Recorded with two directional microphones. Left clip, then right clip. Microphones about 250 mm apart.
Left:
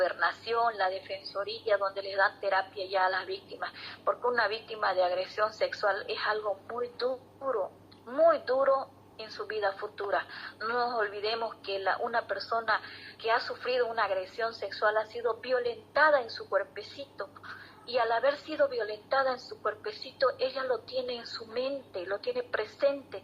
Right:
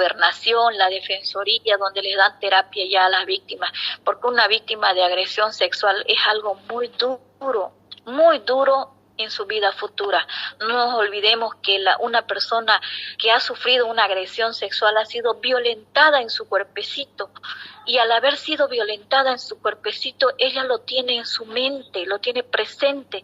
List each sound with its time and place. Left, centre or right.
0.0 s a woman's voice: right